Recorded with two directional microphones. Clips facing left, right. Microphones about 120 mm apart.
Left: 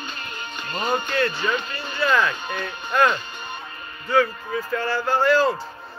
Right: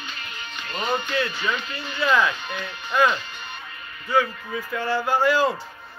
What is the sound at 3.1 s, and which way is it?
Music, 45° left (ahead or behind).